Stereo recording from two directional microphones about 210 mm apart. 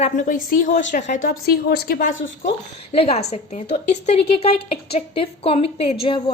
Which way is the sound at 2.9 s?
30° left (ahead or behind).